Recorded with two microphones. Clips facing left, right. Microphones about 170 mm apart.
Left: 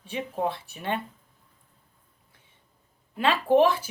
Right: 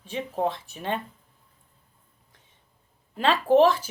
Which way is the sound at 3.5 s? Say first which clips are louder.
Right 2 dB; 55° left (ahead or behind).